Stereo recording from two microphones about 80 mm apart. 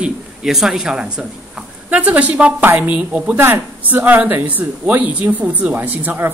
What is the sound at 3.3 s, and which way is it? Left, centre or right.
Speech, right.